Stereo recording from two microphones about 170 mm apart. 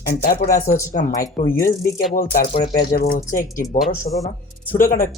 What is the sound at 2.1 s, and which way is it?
Speech, 60° left (ahead or behind).